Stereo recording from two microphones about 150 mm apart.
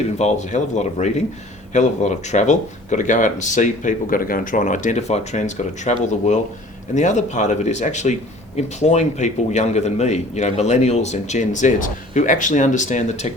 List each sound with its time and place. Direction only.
0.2 s a man's voice: 50° left (ahead or behind)